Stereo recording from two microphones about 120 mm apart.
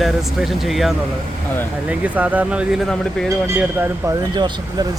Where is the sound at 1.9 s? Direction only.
10° right (ahead or behind).